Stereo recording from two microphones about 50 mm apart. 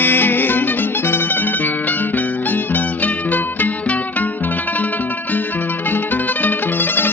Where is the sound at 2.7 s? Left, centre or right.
Left.